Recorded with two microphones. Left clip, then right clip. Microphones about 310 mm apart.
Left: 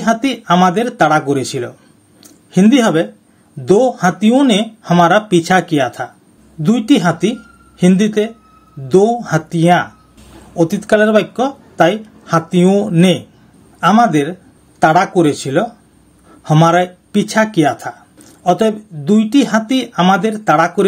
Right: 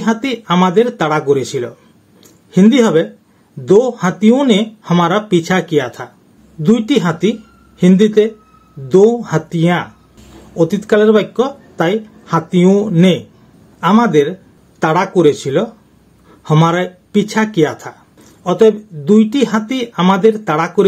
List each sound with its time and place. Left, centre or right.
0.0 s speech: left